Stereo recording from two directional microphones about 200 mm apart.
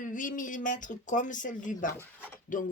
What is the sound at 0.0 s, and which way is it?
Speech, 40° left (ahead or behind).